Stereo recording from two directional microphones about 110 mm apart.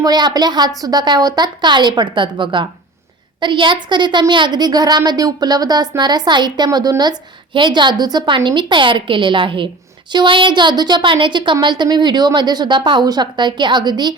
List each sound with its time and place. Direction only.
0.0 s a woman's voice: 40° right (ahead or behind)